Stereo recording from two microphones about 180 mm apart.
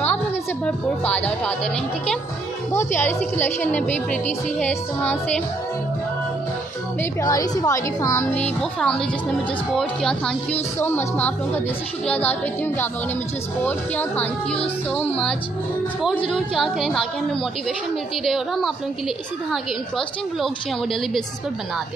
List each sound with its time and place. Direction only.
0.7 s speech: 5° left (ahead or behind)
2.7 s speech: 15° left (ahead or behind)
7.0 s speech: 20° left (ahead or behind)
8.5 s a woman's voice: 5° left (ahead or behind)
18.2 s a woman's voice: centre (ahead or behind)